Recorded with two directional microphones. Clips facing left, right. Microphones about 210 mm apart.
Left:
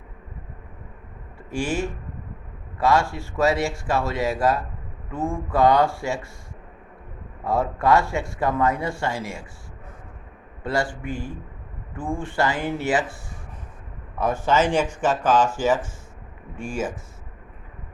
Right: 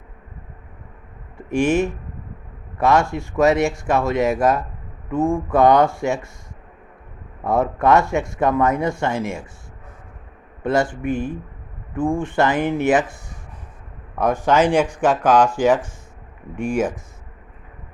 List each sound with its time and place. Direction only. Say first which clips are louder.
1.4 s speech: right 7 dB; 20° right (ahead or behind)
7.4 s speech: right 4 dB; 20° right (ahead or behind)
10.6 s speech: right 6 dB; 20° right (ahead or behind)
14.4 s speech: right 4 dB; 15° right (ahead or behind)